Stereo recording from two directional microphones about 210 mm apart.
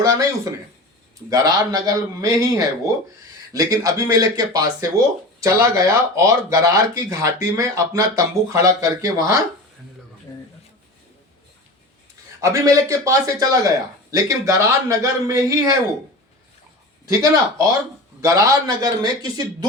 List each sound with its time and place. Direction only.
0.0 s speech: 15° right (ahead or behind)
1.3 s speech: 15° right (ahead or behind)
12.4 s speech: 15° right (ahead or behind)
17.1 s speech: 15° right (ahead or behind)